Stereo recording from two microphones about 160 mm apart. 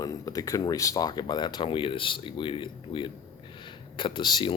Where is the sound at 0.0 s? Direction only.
20° left (ahead or behind).